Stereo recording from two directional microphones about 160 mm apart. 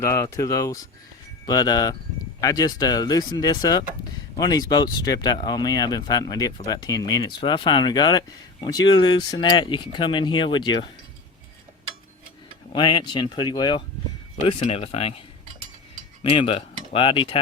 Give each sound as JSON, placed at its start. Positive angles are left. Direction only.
{"t": 0.0, "sound": "speech", "side_deg": 15}
{"t": 12.7, "sound": "speech", "side_deg": 30}
{"t": 14.4, "sound": "speech", "side_deg": 40}
{"t": 16.3, "sound": "speech", "side_deg": 35}